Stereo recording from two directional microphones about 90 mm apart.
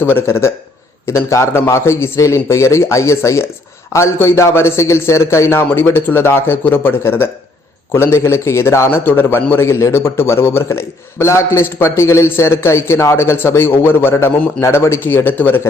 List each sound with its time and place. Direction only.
0.0 s a man's voice: 25° left (ahead or behind)